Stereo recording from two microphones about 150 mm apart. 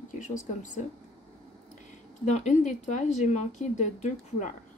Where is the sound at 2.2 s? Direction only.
55° left (ahead or behind).